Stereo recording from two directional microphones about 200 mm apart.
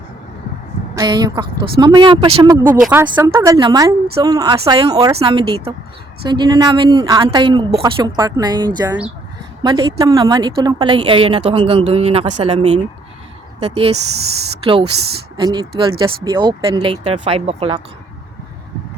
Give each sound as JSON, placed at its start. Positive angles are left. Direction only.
{"t": 0.9, "sound": "a woman's voice", "side_deg": -20}
{"t": 2.5, "sound": "a woman's voice", "side_deg": -10}